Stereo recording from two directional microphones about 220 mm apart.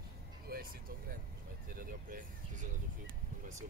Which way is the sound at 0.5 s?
40° right (ahead or behind).